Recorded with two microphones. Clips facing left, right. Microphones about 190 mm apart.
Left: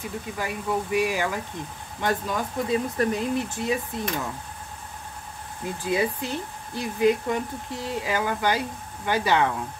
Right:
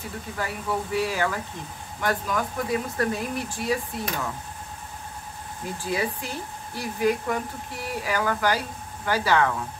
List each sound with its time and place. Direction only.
0.4 s speech: 15° left (ahead or behind)
5.9 s speech: 20° left (ahead or behind)